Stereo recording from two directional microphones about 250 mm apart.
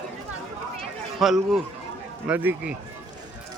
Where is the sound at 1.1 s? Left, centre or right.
Centre.